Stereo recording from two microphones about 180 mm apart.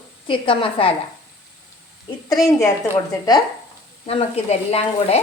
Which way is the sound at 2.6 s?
20° left (ahead or behind).